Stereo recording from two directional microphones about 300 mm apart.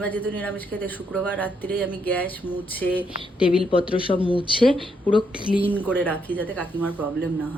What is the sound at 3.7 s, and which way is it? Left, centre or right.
Speech, centre.